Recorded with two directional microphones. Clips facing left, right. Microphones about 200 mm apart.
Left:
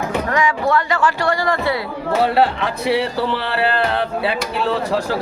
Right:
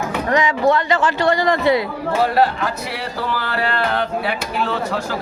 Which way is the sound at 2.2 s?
25° left (ahead or behind).